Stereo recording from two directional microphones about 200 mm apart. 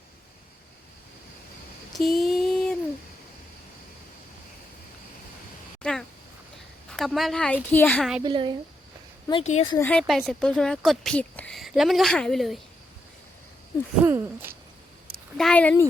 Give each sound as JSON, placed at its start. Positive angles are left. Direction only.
{"t": 1.9, "sound": "a sound", "side_deg": 0}
{"t": 5.8, "sound": "a sound", "side_deg": 5}
{"t": 6.9, "sound": "speech", "side_deg": 0}
{"t": 8.2, "sound": "speech", "side_deg": -25}
{"t": 9.4, "sound": "speech", "side_deg": 30}
{"t": 9.7, "sound": "speech", "side_deg": 10}
{"t": 14.0, "sound": "hoot", "side_deg": -10}
{"t": 15.4, "sound": "speech", "side_deg": 5}